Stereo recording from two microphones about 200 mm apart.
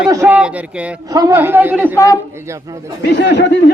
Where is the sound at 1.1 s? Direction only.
20° right (ahead or behind).